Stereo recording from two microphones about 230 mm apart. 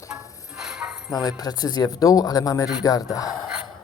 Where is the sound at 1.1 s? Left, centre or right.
Centre.